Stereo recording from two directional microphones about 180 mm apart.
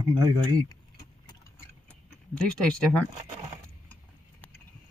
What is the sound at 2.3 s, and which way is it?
Speech, 5° left (ahead or behind).